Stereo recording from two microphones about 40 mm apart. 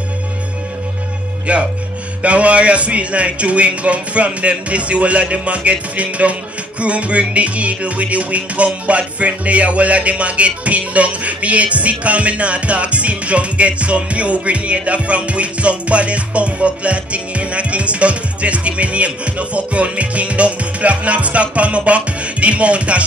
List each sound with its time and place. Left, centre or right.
1.5 s music: right